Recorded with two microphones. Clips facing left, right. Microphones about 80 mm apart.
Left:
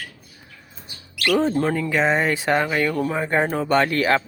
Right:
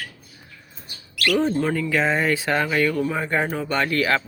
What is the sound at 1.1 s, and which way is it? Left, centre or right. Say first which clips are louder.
Bird: left 1 dB; left.